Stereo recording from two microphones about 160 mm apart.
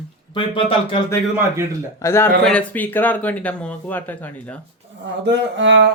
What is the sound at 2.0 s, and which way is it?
Speech, 15° left (ahead or behind).